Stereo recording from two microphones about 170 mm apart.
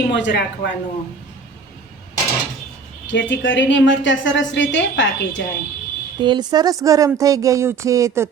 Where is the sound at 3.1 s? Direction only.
90° left.